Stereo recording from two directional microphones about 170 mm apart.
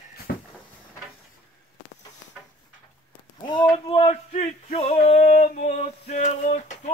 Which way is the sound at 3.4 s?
30° left (ahead or behind).